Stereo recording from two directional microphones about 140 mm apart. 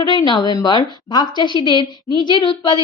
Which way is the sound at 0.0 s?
35° left (ahead or behind).